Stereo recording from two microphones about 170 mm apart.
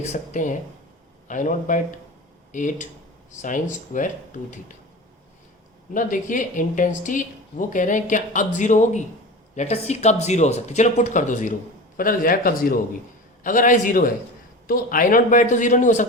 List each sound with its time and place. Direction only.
0.0 s speech: 45° left (ahead or behind)
5.9 s a man's voice: 50° left (ahead or behind)